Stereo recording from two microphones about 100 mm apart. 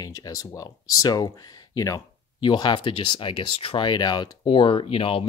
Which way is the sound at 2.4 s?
50° left (ahead or behind).